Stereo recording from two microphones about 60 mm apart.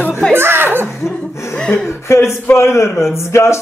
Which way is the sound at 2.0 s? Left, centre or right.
Left.